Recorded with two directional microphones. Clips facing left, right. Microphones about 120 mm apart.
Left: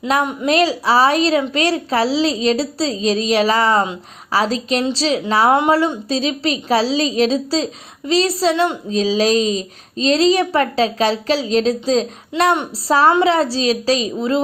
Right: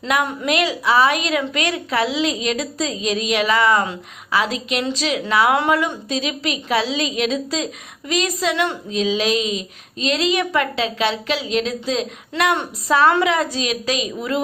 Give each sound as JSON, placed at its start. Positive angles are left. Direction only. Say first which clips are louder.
{"t": 0.1, "sound": "a woman's voice", "louder": "left 3 dB", "side_deg": 35}
{"t": 8.5, "sound": "a woman's voice", "louder": "left 4 dB", "side_deg": 20}
{"t": 8.9, "sound": "a woman's voice", "louder": "left 4 dB", "side_deg": 35}
{"t": 12.3, "sound": "speech", "louder": "left 4 dB", "side_deg": 15}
{"t": 12.9, "sound": "a woman's voice", "louder": "left 3 dB", "side_deg": 35}